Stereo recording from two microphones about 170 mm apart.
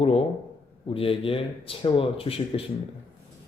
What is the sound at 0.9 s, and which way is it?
Speech, 35° left (ahead or behind).